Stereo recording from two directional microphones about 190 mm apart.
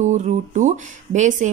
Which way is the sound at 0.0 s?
40° right (ahead or behind).